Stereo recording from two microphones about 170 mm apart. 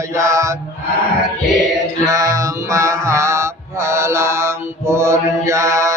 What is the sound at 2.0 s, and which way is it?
Mantra, 20° right (ahead or behind).